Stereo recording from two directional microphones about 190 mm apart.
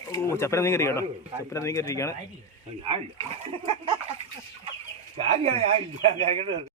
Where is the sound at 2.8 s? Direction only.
30° right (ahead or behind).